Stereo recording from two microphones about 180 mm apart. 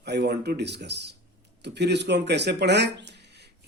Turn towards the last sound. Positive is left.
turn(degrees=-70)  # may be behind; listen again after turning